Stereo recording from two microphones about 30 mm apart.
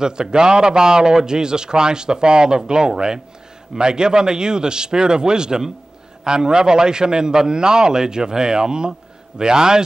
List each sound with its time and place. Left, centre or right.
0.0 s a man's voice: right